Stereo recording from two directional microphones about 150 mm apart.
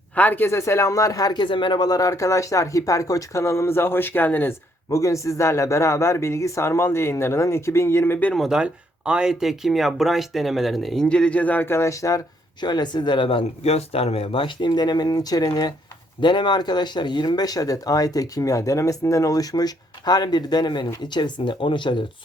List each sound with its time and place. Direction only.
0.2 s speech: 15° left (ahead or behind)
8.3 s speech: centre (ahead or behind); by 22.0 s 30° left (ahead or behind)